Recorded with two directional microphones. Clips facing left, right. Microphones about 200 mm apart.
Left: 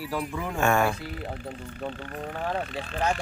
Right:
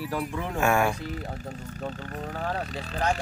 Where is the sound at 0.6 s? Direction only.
10° right (ahead or behind).